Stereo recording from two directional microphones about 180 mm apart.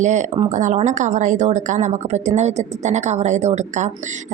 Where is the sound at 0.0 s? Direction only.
40° right (ahead or behind).